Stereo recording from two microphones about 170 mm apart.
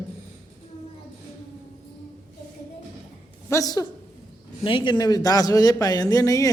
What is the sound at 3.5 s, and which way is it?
Speech, 20° left (ahead or behind).